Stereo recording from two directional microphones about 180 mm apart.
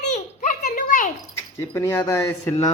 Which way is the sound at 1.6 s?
15° left (ahead or behind).